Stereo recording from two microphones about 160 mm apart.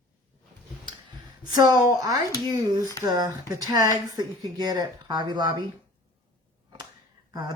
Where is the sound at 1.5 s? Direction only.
25° right (ahead or behind).